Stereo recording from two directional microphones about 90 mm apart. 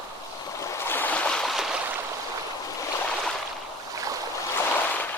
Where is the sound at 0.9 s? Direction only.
20° left (ahead or behind); by 1.6 s centre (ahead or behind).